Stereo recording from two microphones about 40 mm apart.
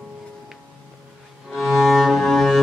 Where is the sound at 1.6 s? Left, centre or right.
Centre.